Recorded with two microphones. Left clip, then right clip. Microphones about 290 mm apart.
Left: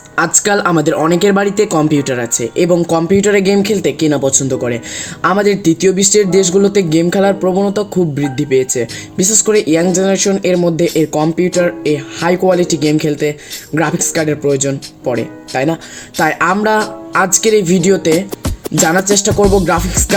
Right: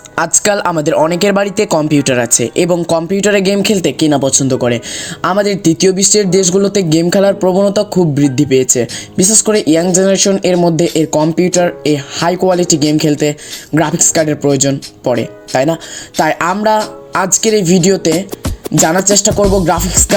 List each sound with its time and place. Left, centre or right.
0.2 s speech: right
18.4 s music: centre
18.9 s speech: centre
19.4 s music: centre
19.6 s speech: centre